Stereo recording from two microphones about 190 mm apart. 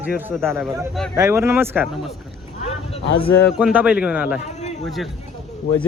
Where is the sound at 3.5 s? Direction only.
5° right (ahead or behind).